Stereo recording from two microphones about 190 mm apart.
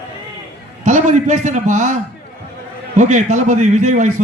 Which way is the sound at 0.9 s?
40° right (ahead or behind).